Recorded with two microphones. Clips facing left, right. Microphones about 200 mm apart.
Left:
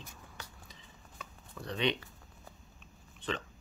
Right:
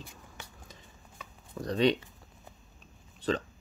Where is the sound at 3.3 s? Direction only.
40° right (ahead or behind).